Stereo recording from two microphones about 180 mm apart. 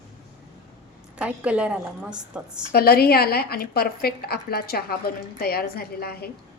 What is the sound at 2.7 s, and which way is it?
A woman's voice, 60° left (ahead or behind).